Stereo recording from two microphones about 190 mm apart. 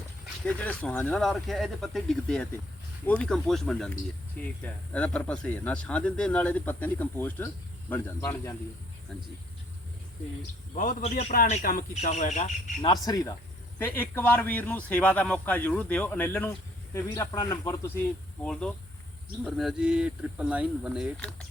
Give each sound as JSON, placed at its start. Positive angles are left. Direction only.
{"t": 0.4, "sound": "a man's voice", "side_deg": 5}
{"t": 10.8, "sound": "a man's voice", "side_deg": 45}
{"t": 12.8, "sound": "a man's voice", "side_deg": 20}